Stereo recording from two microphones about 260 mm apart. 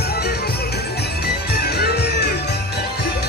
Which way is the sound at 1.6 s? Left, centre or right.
Left.